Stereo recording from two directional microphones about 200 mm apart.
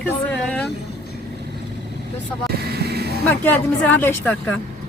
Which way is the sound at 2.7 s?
55° right (ahead or behind).